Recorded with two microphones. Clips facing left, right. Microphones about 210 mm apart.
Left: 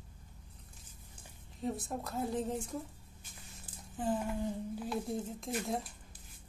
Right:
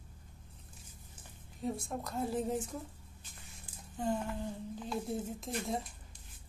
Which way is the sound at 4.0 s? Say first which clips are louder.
Even; 5° left (ahead or behind).